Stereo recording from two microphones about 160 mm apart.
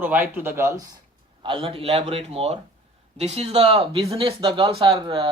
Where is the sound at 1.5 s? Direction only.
35° right (ahead or behind).